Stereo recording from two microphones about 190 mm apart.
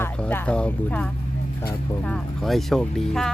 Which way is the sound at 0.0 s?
10° left (ahead or behind).